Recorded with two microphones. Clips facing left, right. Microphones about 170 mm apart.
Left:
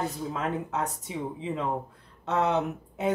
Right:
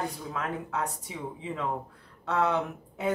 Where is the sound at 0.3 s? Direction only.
20° left (ahead or behind).